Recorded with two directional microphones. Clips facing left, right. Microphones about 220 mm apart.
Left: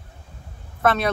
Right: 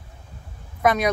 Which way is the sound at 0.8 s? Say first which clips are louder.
Right 1 dB; 15° right (ahead or behind).